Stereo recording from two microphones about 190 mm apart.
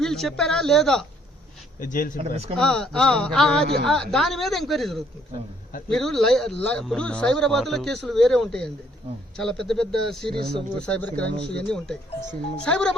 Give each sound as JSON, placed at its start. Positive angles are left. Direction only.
{"t": 0.0, "sound": "speech", "side_deg": 0}
{"t": 1.8, "sound": "speech", "side_deg": 45}
{"t": 2.3, "sound": "speech", "side_deg": -30}
{"t": 2.6, "sound": "speech", "side_deg": 5}